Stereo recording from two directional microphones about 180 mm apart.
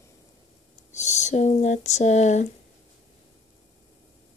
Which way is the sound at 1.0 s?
40° left (ahead or behind).